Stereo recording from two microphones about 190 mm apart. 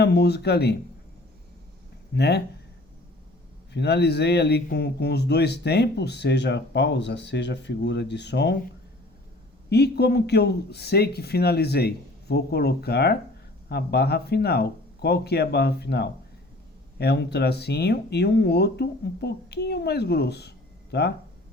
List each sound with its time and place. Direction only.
0.0 s a man's voice: 60° left (ahead or behind)
2.1 s a man's voice: 60° left (ahead or behind)
3.7 s a man's voice: 65° left (ahead or behind)
9.6 s a man's voice: 60° left (ahead or behind)